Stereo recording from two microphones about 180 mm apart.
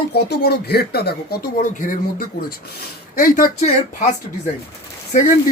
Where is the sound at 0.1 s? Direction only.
65° left (ahead or behind); by 4.1 s 45° left (ahead or behind).